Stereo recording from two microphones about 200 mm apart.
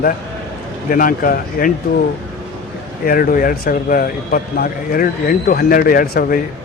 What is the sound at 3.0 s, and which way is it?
A man's voice, 45° left (ahead or behind).